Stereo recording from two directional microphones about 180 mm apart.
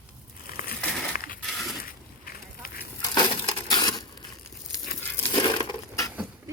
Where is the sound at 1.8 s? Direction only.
55° left (ahead or behind).